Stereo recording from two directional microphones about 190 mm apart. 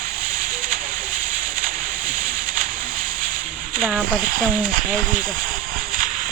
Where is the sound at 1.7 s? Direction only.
50° right (ahead or behind).